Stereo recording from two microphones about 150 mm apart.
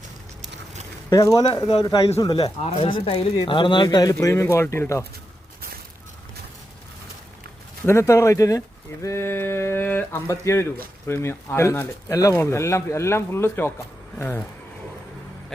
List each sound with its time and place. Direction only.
1.1 s speech: 20° left (ahead or behind)
2.7 s speech: 40° left (ahead or behind); by 5.0 s 20° left (ahead or behind)
7.9 s speech: 20° left (ahead or behind)